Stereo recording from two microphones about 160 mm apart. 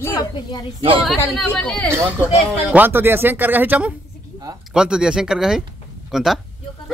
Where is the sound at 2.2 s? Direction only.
10° right (ahead or behind).